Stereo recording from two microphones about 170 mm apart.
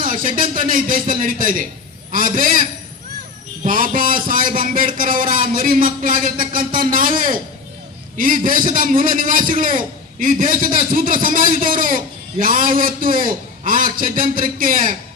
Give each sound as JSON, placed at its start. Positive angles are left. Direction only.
{"t": 0.0, "sound": "a man's voice", "side_deg": -55}